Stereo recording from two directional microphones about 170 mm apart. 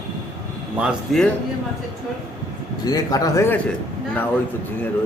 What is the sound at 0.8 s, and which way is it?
Speech, centre (ahead or behind).